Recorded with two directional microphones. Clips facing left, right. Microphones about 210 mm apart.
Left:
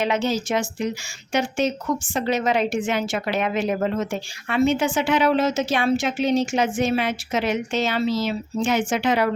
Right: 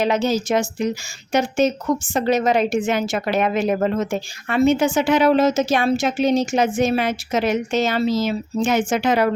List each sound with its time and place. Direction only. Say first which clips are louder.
0.0 s a woman's voice: right 3 dB; 40° right (ahead or behind)